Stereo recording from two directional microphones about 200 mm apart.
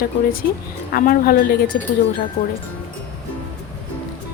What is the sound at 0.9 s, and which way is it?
Speech, 45° left (ahead or behind).